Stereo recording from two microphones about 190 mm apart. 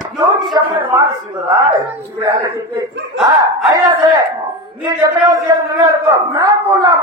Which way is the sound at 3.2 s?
20° right (ahead or behind).